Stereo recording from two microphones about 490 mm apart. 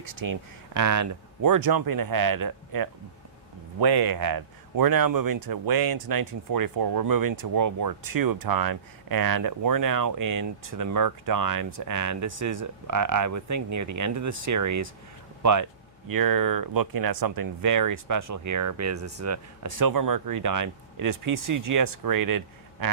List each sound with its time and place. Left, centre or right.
0.0 s speech: right
16.0 s speech: right